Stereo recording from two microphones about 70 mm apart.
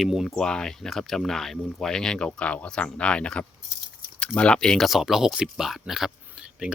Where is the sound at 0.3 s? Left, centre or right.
Centre.